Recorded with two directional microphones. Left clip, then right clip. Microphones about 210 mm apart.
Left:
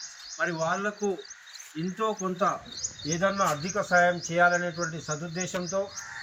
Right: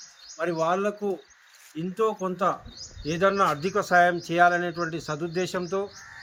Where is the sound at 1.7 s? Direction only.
45° right (ahead or behind).